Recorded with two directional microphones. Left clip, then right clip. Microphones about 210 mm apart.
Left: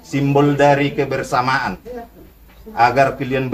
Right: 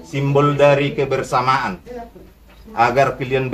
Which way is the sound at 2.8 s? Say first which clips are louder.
Left 1 dB; 10° left (ahead or behind).